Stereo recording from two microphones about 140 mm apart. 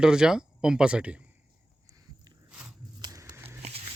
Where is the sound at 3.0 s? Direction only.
25° right (ahead or behind).